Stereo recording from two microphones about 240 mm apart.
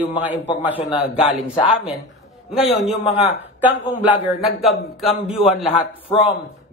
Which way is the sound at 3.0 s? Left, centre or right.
Left.